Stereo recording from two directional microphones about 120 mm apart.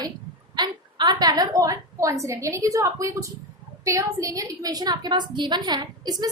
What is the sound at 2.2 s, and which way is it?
A woman's voice, 25° right (ahead or behind).